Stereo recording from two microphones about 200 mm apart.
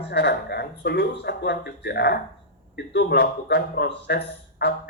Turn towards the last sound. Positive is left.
turn(degrees=60)  # may be behind; listen again after turning